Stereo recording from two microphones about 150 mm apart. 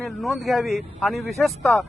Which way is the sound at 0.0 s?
Centre (ahead or behind).